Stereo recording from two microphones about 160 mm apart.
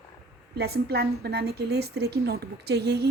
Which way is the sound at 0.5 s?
80° right.